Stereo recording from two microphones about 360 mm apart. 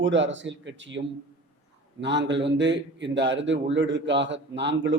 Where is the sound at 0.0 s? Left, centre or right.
Right.